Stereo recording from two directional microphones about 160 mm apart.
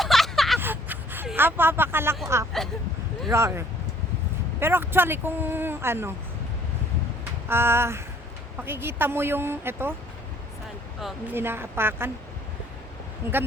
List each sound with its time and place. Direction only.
0.0 s a sound: centre (ahead or behind)
0.6 s a sound: 10° right (ahead or behind)
2.2 s speech: 20° right (ahead or behind)
4.6 s speech: 15° right (ahead or behind)
7.4 s speech: 15° right (ahead or behind)
11.0 s speech: 10° right (ahead or behind)
13.2 s speech: 15° right (ahead or behind)